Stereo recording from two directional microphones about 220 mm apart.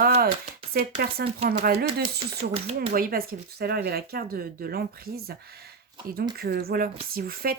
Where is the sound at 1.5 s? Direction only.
45° right (ahead or behind).